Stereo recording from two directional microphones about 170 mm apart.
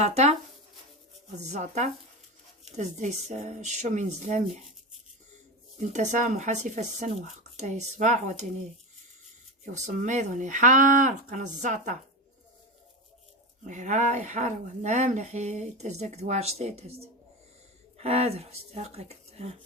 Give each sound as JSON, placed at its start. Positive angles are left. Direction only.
{"t": 0.0, "sound": "speech", "side_deg": -40}
{"t": 1.4, "sound": "speech", "side_deg": -45}
{"t": 5.9, "sound": "speech", "side_deg": -45}
{"t": 9.7, "sound": "speech", "side_deg": -50}
{"t": 13.7, "sound": "speech", "side_deg": -45}